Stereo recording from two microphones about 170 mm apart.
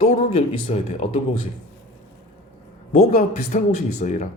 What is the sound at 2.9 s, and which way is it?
Speech, 45° left (ahead or behind).